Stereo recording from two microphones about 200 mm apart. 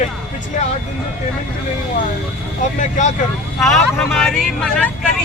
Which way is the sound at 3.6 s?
Centre (ahead or behind).